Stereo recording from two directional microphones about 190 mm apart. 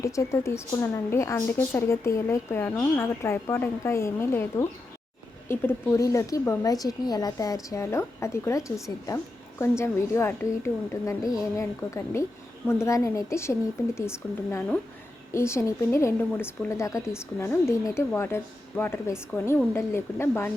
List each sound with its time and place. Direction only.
0.0 s a woman's voice: 15° left (ahead or behind)
15.3 s a woman's voice: 15° left (ahead or behind)